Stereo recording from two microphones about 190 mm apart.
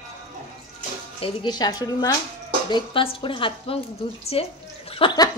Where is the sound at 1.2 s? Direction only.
25° left (ahead or behind).